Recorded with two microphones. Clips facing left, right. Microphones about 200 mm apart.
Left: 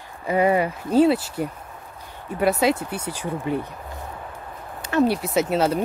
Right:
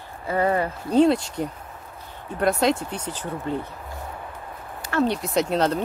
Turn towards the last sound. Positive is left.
turn(degrees=5)  # may be behind; listen again after turning